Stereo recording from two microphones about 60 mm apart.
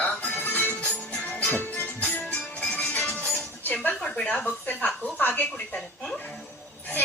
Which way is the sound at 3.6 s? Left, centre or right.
Left.